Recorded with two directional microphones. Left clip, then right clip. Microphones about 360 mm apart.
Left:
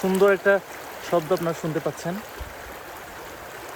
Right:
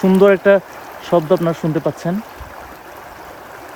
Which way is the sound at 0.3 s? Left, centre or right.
Right.